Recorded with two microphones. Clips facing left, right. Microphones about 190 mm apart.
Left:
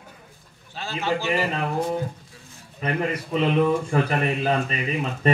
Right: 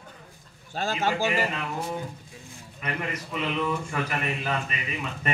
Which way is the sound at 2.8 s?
35° left (ahead or behind).